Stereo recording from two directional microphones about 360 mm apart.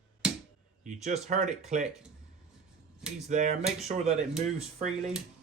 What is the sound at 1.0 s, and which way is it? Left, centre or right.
Speech, centre.